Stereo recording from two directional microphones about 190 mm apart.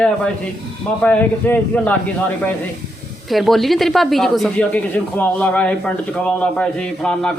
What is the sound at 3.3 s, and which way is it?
Speech, centre (ahead or behind).